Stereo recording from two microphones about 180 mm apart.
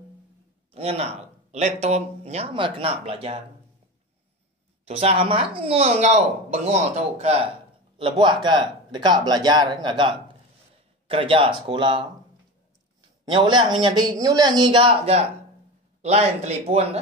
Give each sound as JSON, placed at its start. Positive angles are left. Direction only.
{"t": 0.7, "sound": "speech", "side_deg": -35}
{"t": 4.8, "sound": "speech", "side_deg": -35}
{"t": 13.2, "sound": "speech", "side_deg": -25}